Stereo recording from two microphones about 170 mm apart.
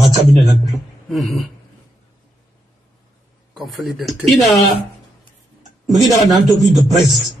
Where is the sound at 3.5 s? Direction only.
Centre (ahead or behind).